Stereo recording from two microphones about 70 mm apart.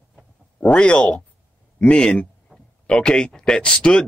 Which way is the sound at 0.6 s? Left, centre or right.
Centre.